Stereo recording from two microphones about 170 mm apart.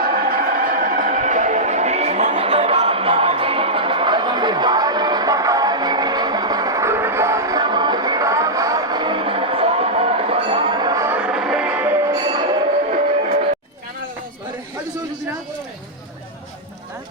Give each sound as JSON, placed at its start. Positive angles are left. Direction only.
{"t": 0.0, "sound": "music", "side_deg": -60}
{"t": 11.2, "sound": "music", "side_deg": -5}
{"t": 11.9, "sound": "music", "side_deg": -25}